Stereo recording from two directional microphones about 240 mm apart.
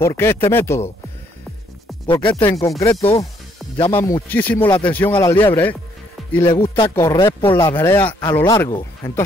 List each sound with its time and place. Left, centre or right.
0.0 s speech: centre
2.0 s speech: centre
3.9 s speech: centre
4.6 s speech: centre
4.9 s speech: centre
5.3 s speech: centre